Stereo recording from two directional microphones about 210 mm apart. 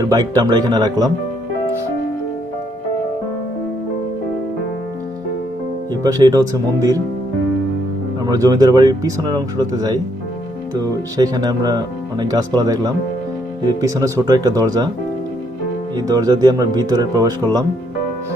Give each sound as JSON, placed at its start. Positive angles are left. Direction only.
{"t": 0.0, "sound": "speech", "side_deg": -20}
{"t": 5.9, "sound": "speech", "side_deg": -15}
{"t": 8.3, "sound": "speech", "side_deg": -15}
{"t": 16.0, "sound": "speech", "side_deg": -20}